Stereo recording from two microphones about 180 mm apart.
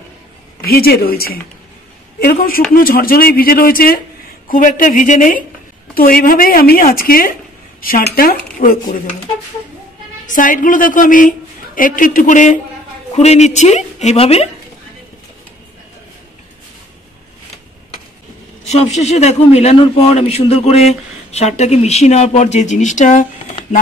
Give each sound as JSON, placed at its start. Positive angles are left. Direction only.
{"t": 0.7, "sound": "a woman's voice", "side_deg": 60}
{"t": 10.2, "sound": "a woman's voice", "side_deg": 50}
{"t": 18.7, "sound": "a man's voice", "side_deg": 35}